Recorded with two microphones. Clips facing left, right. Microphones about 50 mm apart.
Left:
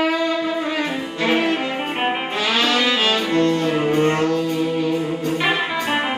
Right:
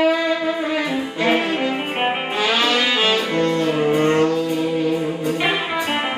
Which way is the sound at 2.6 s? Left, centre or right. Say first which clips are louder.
Left 2 dB; centre.